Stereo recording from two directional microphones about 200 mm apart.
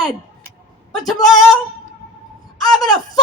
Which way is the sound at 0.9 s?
Centre (ahead or behind).